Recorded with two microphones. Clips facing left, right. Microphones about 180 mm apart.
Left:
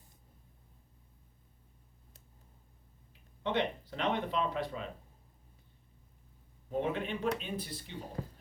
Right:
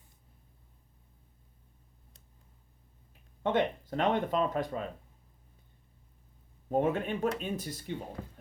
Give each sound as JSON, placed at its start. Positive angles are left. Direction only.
{"t": 3.4, "sound": "speech", "side_deg": -45}
{"t": 6.7, "sound": "speech", "side_deg": -50}